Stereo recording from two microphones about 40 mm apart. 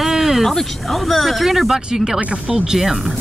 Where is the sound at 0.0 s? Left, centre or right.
Centre.